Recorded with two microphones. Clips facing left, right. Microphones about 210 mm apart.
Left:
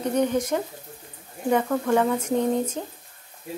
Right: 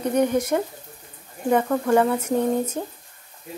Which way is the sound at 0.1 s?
10° right (ahead or behind).